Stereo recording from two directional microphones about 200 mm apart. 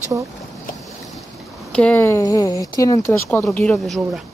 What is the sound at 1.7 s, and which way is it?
Speech, 5° left (ahead or behind).